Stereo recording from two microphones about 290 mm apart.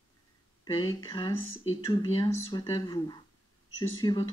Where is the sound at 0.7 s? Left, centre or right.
Centre.